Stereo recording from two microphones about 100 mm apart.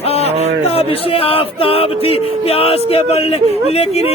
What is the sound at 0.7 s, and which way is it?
Speech, 80° left.